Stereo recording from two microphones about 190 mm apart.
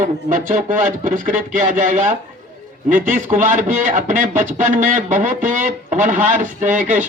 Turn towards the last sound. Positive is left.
turn(degrees=-40)  # may be behind; listen again after turning